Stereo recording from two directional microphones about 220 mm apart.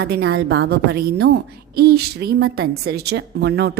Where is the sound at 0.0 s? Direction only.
45° right (ahead or behind).